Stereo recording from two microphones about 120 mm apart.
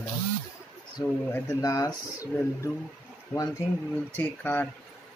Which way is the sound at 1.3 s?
25° left (ahead or behind).